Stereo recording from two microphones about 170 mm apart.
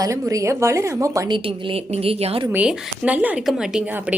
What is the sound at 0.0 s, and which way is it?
A woman's voice, 20° right (ahead or behind).